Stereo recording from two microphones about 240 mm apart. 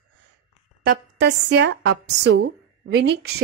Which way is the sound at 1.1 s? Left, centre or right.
Right.